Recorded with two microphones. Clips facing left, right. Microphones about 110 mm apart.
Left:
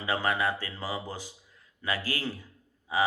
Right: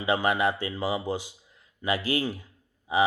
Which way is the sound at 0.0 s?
20° right (ahead or behind).